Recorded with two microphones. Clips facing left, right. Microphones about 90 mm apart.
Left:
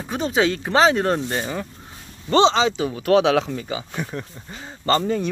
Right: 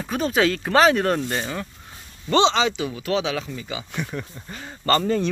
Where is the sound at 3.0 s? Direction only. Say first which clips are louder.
Left 11 dB; 55° left (ahead or behind).